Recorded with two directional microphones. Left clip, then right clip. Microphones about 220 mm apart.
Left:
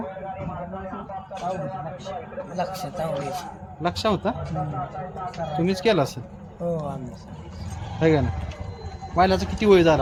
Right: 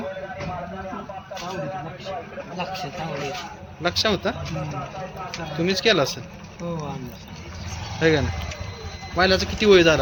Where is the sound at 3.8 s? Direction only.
50° left (ahead or behind).